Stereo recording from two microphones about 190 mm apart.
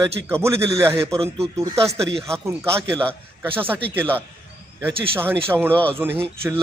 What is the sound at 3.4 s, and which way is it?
Speech, 10° right (ahead or behind).